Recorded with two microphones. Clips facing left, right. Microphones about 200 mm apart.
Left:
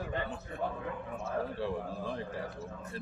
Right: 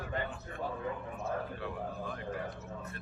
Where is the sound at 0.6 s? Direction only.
60° left (ahead or behind).